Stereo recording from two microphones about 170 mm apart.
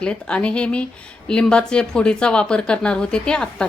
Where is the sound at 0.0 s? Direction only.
5° left (ahead or behind).